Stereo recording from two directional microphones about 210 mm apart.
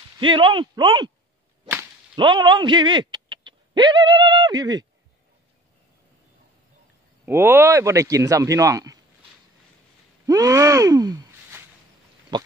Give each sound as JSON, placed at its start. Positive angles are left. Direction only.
{"t": 0.2, "sound": "speech", "side_deg": -25}
{"t": 2.1, "sound": "speech", "side_deg": -20}
{"t": 7.2, "sound": "speech", "side_deg": -10}
{"t": 10.2, "sound": "a sound", "side_deg": -15}
{"t": 12.3, "sound": "pig", "side_deg": -20}